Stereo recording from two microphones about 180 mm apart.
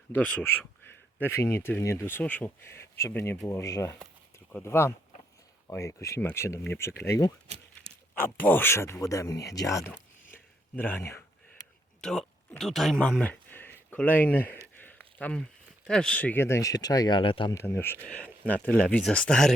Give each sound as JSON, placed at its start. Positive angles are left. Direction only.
{"t": 0.1, "sound": "speech", "side_deg": 10}
{"t": 10.3, "sound": "a sound", "side_deg": 10}
{"t": 11.9, "sound": "speech", "side_deg": 5}
{"t": 14.8, "sound": "a sound", "side_deg": 10}
{"t": 15.9, "sound": "speech", "side_deg": 5}
{"t": 17.5, "sound": "speech", "side_deg": 15}